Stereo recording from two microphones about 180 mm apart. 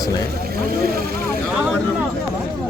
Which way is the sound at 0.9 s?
55° right (ahead or behind).